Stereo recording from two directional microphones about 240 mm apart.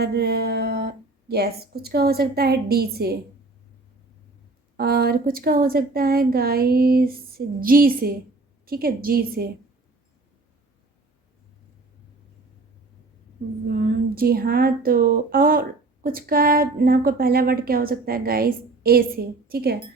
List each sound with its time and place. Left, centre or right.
0.0 s a woman's voice: right
4.8 s a woman's voice: right
13.7 s a woman's voice: right